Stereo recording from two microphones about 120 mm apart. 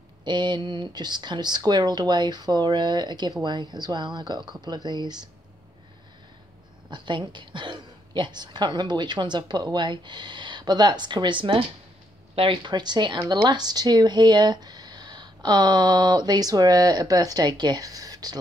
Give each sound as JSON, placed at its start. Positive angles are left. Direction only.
{"t": 0.2, "sound": "speech", "side_deg": -40}
{"t": 6.9, "sound": "speech", "side_deg": -40}